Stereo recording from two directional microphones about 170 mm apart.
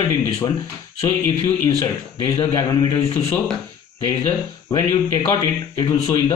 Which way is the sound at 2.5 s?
20° left (ahead or behind).